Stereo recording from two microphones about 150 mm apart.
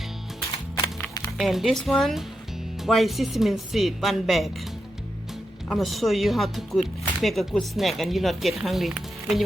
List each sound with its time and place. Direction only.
0.8 s music: 25° left (ahead or behind)
1.4 s speech: centre (ahead or behind)
5.6 s speech: centre (ahead or behind)